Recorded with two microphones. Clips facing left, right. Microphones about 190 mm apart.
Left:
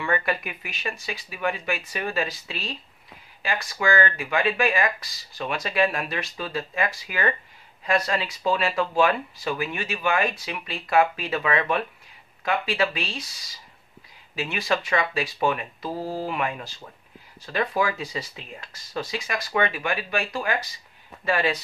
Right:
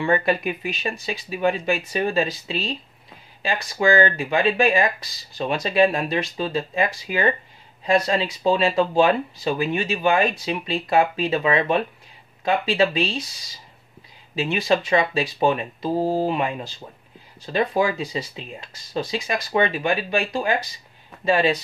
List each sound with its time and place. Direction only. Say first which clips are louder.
0.0 s speech: right 6 dB; 25° right (ahead or behind)
14.3 s speech: right 5 dB; 25° right (ahead or behind)